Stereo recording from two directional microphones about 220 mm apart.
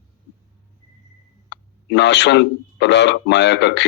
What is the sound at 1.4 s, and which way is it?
Speech, 50° left (ahead or behind).